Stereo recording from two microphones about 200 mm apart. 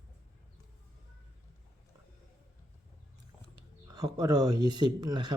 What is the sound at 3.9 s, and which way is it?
Speech, 20° right (ahead or behind).